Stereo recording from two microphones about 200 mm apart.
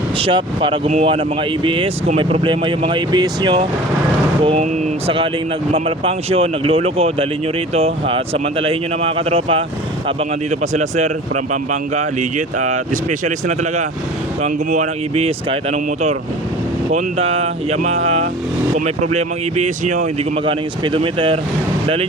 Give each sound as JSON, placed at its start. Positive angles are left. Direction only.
{"t": 0.2, "sound": "speech", "side_deg": -25}
{"t": 12.5, "sound": "speech", "side_deg": -40}
{"t": 14.4, "sound": "speech", "side_deg": -35}
{"t": 20.4, "sound": "speech", "side_deg": -25}